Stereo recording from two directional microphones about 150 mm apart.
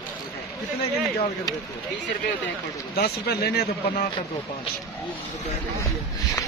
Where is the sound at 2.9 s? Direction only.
90° left.